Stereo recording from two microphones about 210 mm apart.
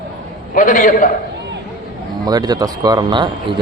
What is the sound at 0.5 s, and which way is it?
Speech, 40° left (ahead or behind).